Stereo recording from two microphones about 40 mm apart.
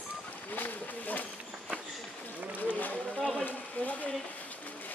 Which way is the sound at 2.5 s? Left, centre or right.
Left.